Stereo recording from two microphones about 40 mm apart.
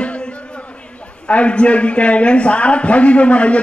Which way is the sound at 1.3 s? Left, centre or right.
Left.